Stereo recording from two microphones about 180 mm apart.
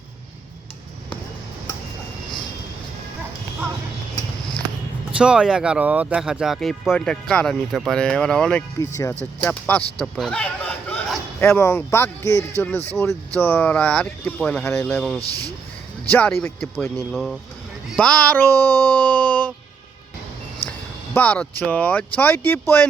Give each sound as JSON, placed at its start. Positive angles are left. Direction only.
{"t": 5.1, "sound": "speech", "side_deg": -5}
{"t": 8.8, "sound": "speech", "side_deg": 15}
{"t": 17.8, "sound": "music", "side_deg": 5}
{"t": 20.7, "sound": "speech", "side_deg": 10}